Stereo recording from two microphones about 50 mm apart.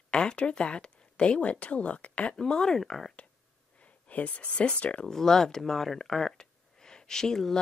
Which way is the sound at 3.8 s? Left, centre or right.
Left.